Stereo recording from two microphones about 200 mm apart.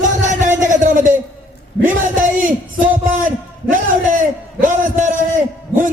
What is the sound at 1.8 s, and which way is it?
Speech, 40° right (ahead or behind).